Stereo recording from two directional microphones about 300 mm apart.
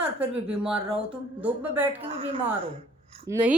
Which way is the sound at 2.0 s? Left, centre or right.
Centre.